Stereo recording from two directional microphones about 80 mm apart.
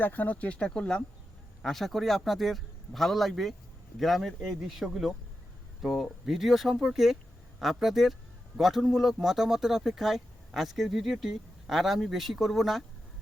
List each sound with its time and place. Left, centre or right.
0.0 s speech: left; by 12.8 s centre